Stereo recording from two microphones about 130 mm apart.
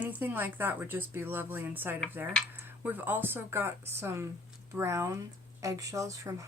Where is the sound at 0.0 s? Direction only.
15° right (ahead or behind).